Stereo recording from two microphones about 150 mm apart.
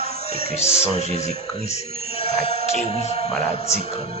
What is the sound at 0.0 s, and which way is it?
Speech, 45° left (ahead or behind).